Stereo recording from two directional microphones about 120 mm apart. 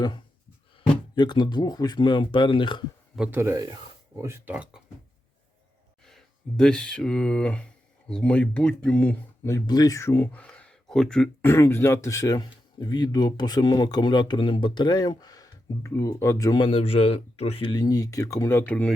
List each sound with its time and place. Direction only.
1.1 s speech: 35° left (ahead or behind)
3.3 s speech: 20° right (ahead or behind)
4.5 s speech: 10° right (ahead or behind)
6.1 s speech: 5° left (ahead or behind)
9.4 s speech: 20° left (ahead or behind)
9.6 s speech: 30° left (ahead or behind); by 11.3 s 5° left (ahead or behind)
11.4 s speech: 20° left (ahead or behind)
16.6 s a man's voice: 50° left (ahead or behind)
17.7 s speech: 35° left (ahead or behind); by 18.9 s 10° left (ahead or behind)